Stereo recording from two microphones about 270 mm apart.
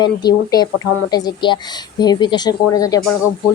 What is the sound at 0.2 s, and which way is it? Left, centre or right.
Speech, centre.